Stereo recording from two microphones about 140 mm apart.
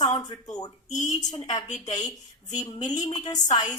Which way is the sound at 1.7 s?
60° left (ahead or behind).